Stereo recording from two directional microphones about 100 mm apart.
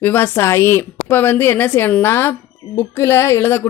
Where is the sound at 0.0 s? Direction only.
20° left (ahead or behind).